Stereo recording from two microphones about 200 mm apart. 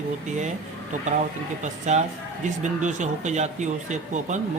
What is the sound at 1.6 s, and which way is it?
Speech, 35° right (ahead or behind).